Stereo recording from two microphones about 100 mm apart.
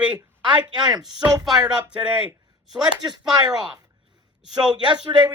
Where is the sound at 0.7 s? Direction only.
45° right (ahead or behind).